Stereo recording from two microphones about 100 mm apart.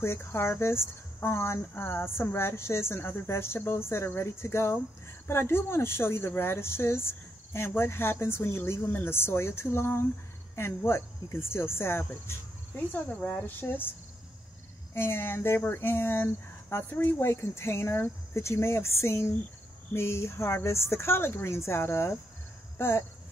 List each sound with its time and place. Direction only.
0.0 s a woman's voice: 25° left (ahead or behind)
15.0 s a woman's voice: 25° left (ahead or behind)